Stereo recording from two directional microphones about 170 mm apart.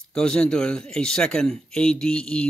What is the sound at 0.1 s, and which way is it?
Speech, 5° left (ahead or behind).